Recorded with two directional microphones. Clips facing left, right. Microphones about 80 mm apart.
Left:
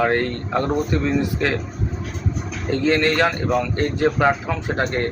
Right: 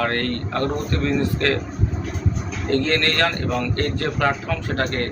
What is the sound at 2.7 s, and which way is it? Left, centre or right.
Speech, centre.